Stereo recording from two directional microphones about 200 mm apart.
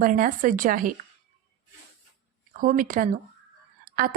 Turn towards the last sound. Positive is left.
turn(degrees=-45)  # may be behind; listen again after turning